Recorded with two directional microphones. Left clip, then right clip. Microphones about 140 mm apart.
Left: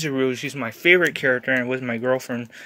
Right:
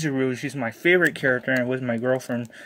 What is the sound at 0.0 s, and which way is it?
Speech, 25° right (ahead or behind).